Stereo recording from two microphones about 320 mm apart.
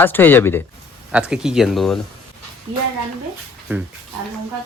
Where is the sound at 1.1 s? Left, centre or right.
Centre.